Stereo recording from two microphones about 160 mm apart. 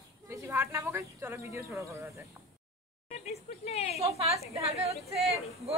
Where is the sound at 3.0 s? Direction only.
40° left (ahead or behind).